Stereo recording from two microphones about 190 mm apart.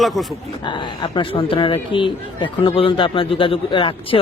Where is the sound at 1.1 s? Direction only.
25° left (ahead or behind).